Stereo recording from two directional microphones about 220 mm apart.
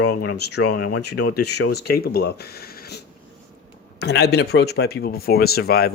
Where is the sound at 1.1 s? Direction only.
90° left.